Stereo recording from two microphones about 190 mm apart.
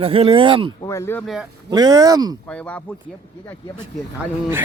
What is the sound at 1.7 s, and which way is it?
Speech, 20° right (ahead or behind).